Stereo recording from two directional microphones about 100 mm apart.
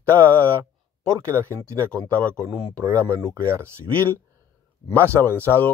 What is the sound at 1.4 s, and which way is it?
Speech, 30° right (ahead or behind).